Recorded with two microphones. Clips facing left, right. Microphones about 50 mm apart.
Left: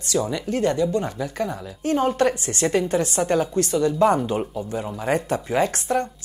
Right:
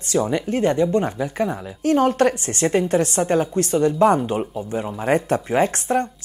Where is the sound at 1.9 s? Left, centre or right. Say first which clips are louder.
Right 3 dB; right.